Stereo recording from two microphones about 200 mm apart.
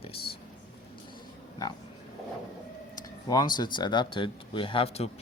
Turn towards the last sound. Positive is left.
turn(degrees=30)  # may be behind; listen again after turning